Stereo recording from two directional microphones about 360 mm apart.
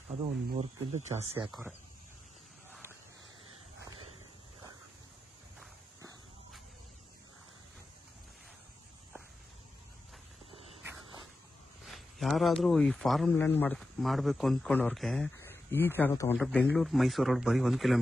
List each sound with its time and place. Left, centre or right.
0.5 s speech: centre
1.5 s speech: centre
5.6 s walk: centre
10.5 s walk: centre
11.8 s speech: centre